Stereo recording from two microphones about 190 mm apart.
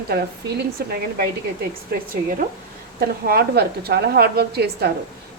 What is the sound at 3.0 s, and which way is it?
A woman's voice, 55° right (ahead or behind).